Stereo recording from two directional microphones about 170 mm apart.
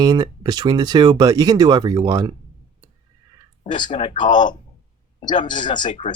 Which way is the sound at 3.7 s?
30° left (ahead or behind).